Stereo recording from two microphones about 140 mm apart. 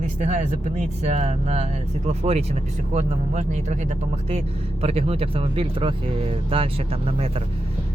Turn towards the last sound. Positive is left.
turn(degrees=-45)  # may be behind; listen again after turning